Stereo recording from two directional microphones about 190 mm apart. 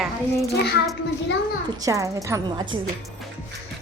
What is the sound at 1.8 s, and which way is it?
Speech, 15° right (ahead or behind).